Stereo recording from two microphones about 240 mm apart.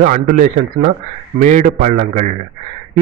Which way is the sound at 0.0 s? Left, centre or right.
Right.